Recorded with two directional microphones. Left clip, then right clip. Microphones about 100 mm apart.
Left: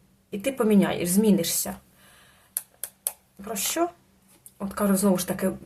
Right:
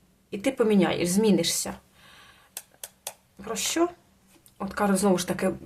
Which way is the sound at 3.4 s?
20° right (ahead or behind).